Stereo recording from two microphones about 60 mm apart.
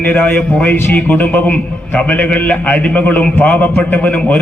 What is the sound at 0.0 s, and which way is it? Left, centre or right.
A man's voice, left.